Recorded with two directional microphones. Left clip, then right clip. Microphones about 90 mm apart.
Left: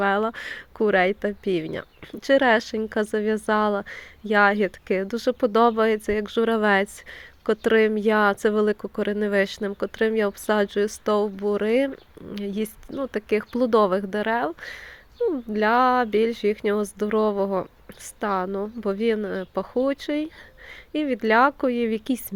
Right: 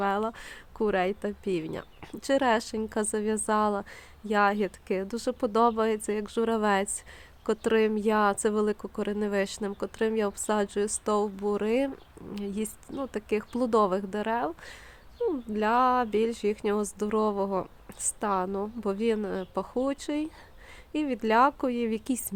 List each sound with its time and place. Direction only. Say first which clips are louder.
0.0 s speech: left 6 dB; 35° left (ahead or behind); by 22.4 s 20° left (ahead or behind)